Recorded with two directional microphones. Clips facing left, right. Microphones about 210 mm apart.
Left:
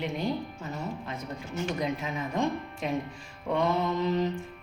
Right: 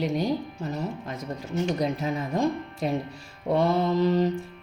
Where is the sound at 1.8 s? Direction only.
40° right (ahead or behind).